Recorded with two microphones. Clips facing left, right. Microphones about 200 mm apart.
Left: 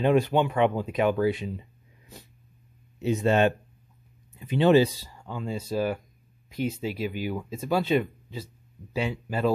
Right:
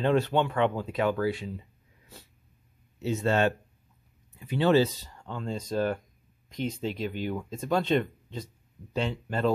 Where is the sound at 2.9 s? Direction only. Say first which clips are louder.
Left 3 dB; 15° left (ahead or behind).